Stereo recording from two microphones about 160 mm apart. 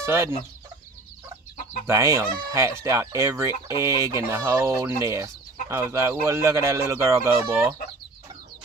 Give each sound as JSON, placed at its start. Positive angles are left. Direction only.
{"t": 0.0, "sound": "speech", "side_deg": -15}
{"t": 1.9, "sound": "speech", "side_deg": -20}